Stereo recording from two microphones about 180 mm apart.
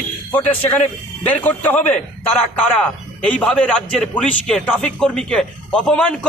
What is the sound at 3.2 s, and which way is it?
A man's voice, 5° left (ahead or behind).